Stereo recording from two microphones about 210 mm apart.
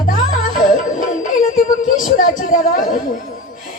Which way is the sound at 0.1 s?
40° left (ahead or behind).